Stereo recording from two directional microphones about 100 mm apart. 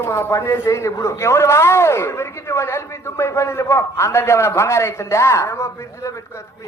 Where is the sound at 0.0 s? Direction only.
25° left (ahead or behind).